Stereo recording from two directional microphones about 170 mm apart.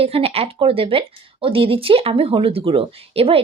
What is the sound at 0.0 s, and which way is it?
Speech, 35° right (ahead or behind).